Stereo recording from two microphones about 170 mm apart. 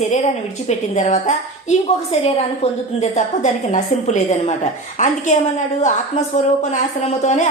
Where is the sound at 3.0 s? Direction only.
45° left (ahead or behind).